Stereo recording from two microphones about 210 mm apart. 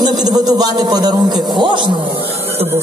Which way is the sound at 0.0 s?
20° right (ahead or behind).